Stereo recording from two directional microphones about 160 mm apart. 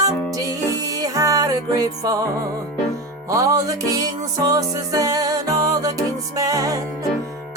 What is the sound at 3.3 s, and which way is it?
Music, 20° right (ahead or behind).